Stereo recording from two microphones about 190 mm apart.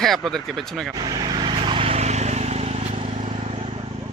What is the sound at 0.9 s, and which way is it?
Vehicle, 20° right (ahead or behind).